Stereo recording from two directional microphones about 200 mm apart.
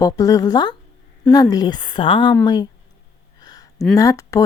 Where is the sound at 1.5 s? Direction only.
20° left (ahead or behind).